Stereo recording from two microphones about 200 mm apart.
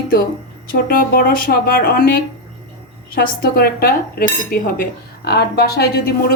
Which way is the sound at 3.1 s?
50° left (ahead or behind).